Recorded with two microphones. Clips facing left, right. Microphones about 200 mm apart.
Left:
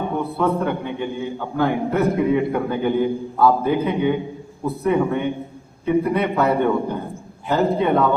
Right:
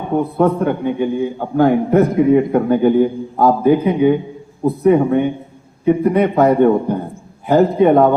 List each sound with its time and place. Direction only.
0.3 s a man's voice: 45° right (ahead or behind)